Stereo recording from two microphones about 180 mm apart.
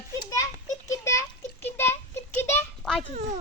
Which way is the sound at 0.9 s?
15° left (ahead or behind).